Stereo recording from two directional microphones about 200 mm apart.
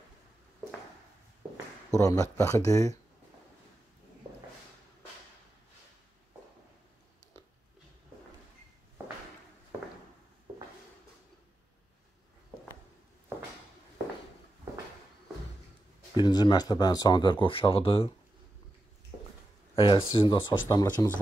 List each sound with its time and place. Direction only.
2.0 s speech: 15° left (ahead or behind)
16.2 s speech: 20° left (ahead or behind)
19.7 s speech: 25° left (ahead or behind)